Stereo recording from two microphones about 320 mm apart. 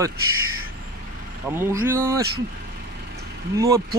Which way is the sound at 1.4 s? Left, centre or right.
Centre.